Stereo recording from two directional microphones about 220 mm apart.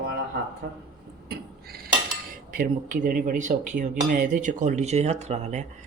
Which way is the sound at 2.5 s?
40° right (ahead or behind).